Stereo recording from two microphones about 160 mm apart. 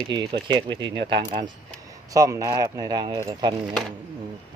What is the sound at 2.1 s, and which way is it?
Speech, 20° right (ahead or behind).